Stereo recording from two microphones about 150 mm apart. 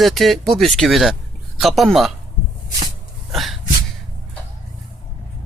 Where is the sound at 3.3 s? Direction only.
Centre (ahead or behind).